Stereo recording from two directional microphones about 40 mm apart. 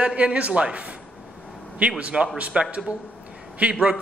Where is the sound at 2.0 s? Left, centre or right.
Right.